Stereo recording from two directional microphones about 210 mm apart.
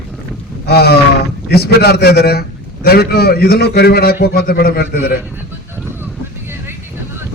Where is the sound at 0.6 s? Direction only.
50° left (ahead or behind).